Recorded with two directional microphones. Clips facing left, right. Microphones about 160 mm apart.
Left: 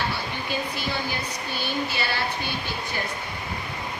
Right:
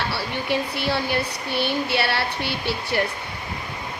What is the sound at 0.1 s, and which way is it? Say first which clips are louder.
Speech: right 5 dB; 70° right (ahead or behind).